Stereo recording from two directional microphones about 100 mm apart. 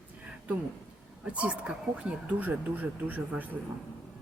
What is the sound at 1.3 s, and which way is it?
Speech, 10° right (ahead or behind).